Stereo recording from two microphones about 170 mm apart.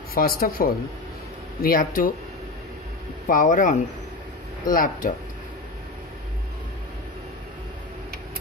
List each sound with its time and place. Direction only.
0.1 s speech: 60° left (ahead or behind)
3.3 s speech: 55° left (ahead or behind)